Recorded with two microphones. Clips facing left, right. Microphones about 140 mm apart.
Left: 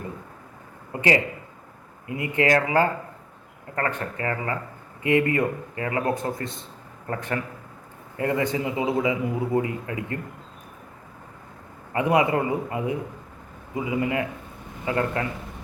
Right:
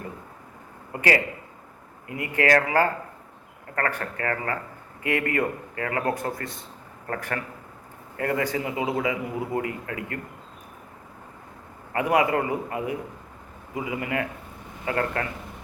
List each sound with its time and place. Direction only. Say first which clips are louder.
2.0 s a man's voice: left 1 dB; 20° left (ahead or behind)
11.9 s a man's voice: left 1 dB; 20° left (ahead or behind)